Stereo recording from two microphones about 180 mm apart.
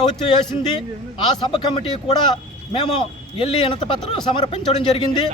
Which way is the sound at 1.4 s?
25° left (ahead or behind).